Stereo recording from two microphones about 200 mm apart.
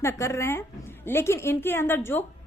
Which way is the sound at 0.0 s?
15° left (ahead or behind).